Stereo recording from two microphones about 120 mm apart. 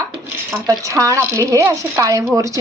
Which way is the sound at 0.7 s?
30° right (ahead or behind).